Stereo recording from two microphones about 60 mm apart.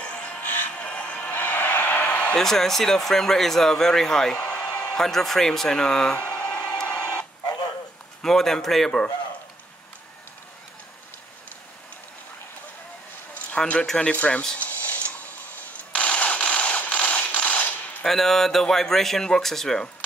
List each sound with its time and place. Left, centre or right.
0.0 s music: left
2.3 s speech: centre
4.5 s a sound: left
4.9 s speech: centre
6.1 s a sound: left
8.2 s speech: centre
13.6 s speech: centre
14.6 s a sound: left
18.0 s speech: centre